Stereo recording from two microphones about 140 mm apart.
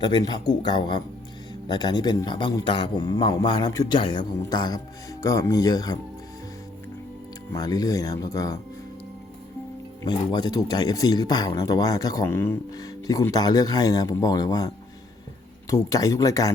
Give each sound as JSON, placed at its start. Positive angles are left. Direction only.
{"t": 0.0, "sound": "a man's voice", "side_deg": 30}
{"t": 7.5, "sound": "speech", "side_deg": 25}
{"t": 10.0, "sound": "speech", "side_deg": 30}
{"t": 15.7, "sound": "speech", "side_deg": 25}